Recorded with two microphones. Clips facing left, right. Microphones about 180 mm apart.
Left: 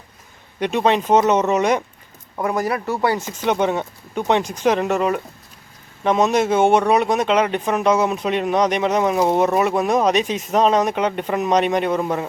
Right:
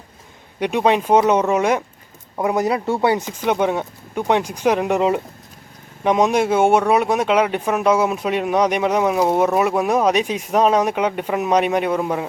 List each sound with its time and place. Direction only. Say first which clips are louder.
0.6 s speech: right 1 dB; 10° right (ahead or behind)
2.4 s speech: right 2 dB; 20° right (ahead or behind)
3.2 s speech: even; 10° right (ahead or behind)